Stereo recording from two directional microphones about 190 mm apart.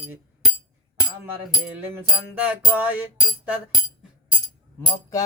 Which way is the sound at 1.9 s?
10° right (ahead or behind).